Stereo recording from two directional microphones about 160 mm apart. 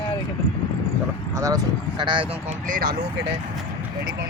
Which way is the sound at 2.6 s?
60° right (ahead or behind).